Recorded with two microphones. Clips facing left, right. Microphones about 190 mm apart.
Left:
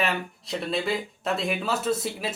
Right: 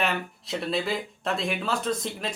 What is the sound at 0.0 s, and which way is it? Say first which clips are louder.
Speech: left 1 dB; centre (ahead or behind).